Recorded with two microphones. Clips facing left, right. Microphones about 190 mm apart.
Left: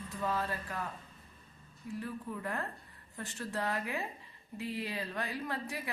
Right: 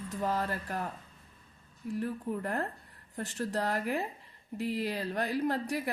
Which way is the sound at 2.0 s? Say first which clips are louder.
Right 6 dB; 45° right (ahead or behind).